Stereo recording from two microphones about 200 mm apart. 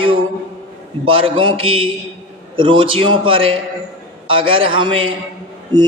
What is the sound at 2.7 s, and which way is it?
A man's voice, 25° right (ahead or behind).